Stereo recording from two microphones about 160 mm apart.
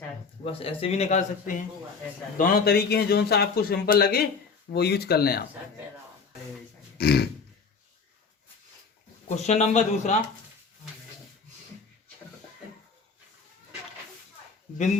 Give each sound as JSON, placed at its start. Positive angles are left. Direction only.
{"t": 0.4, "sound": "a man's voice", "side_deg": 35}
{"t": 2.4, "sound": "a man's voice", "side_deg": 75}
{"t": 4.7, "sound": "speech", "side_deg": 90}
{"t": 7.0, "sound": "speech", "side_deg": 80}
{"t": 9.3, "sound": "speech", "side_deg": 45}